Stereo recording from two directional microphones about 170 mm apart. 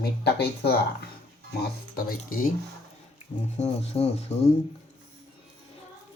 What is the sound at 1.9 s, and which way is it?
Speech, 55° left (ahead or behind).